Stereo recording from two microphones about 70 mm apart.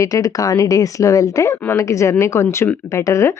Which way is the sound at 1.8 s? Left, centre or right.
Left.